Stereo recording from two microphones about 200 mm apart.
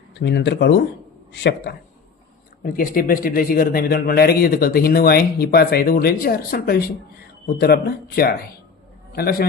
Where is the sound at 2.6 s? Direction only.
45° left (ahead or behind).